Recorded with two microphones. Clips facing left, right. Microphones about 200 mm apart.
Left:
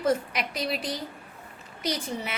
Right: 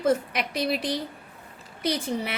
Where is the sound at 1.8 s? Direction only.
55° right (ahead or behind).